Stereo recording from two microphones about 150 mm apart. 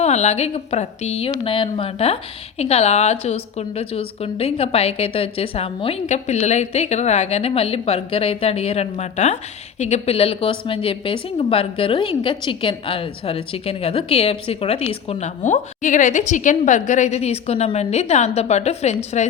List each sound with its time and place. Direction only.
0.0 s a woman's voice: 50° left (ahead or behind)